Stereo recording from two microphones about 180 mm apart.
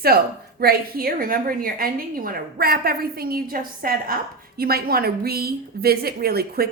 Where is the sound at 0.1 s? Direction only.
60° right (ahead or behind).